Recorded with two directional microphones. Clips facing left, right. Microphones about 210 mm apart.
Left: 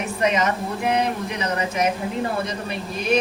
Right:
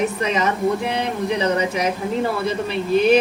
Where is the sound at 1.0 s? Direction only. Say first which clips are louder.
Right 3 dB; 30° right (ahead or behind).